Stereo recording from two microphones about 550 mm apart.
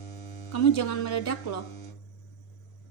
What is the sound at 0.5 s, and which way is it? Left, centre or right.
A woman's voice, left.